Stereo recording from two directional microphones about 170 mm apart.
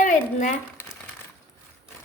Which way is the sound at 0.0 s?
45° left (ahead or behind).